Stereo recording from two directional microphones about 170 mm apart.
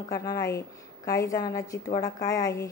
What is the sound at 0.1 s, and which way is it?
A woman's voice, 20° left (ahead or behind).